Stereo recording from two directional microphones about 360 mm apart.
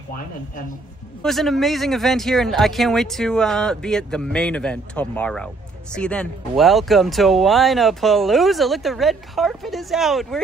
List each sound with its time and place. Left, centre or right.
1.2 s speech: centre